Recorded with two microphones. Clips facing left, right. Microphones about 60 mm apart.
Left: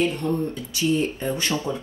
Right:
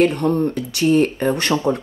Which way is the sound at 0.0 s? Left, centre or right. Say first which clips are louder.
Right 7 dB; right.